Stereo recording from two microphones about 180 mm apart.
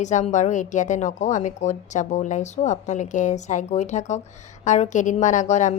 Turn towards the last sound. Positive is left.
turn(degrees=40)  # may be behind; listen again after turning